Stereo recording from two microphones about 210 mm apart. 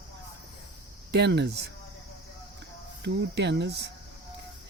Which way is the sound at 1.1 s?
55° right (ahead or behind).